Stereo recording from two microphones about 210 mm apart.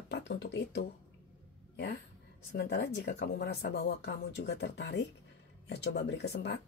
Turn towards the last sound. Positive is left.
turn(degrees=50)  # may be behind; listen again after turning